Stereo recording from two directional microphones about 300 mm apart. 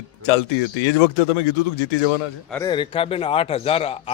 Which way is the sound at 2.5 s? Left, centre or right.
Centre.